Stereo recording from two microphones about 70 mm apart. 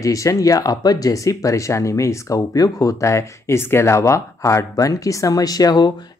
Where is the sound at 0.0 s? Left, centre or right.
Left.